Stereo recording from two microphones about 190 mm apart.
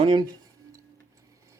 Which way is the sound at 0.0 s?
25° right (ahead or behind).